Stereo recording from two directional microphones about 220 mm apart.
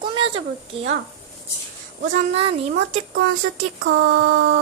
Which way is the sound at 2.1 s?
30° right (ahead or behind).